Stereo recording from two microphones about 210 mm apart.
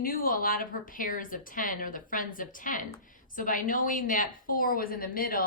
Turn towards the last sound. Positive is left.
turn(degrees=45)  # may be behind; listen again after turning